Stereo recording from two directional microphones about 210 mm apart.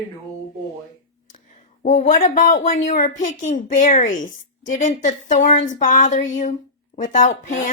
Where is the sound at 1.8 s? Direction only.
35° left (ahead or behind).